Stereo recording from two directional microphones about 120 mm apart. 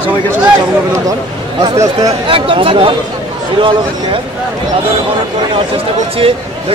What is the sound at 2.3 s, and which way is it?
Speech, 45° right (ahead or behind).